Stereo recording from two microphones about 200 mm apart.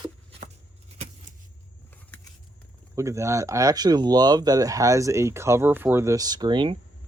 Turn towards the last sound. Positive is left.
turn(degrees=-25)  # may be behind; listen again after turning